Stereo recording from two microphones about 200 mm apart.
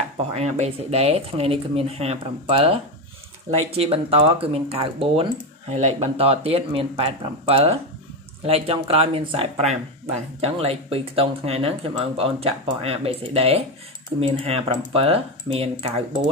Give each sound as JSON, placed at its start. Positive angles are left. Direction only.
{"t": 0.3, "sound": "speech", "side_deg": -30}